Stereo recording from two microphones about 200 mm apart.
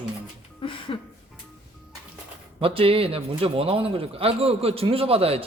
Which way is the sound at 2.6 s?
30° right (ahead or behind).